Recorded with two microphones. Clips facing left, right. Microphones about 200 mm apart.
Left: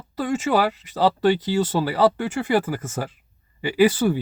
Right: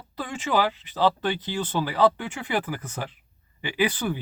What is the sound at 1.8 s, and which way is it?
Speech, 40° left (ahead or behind).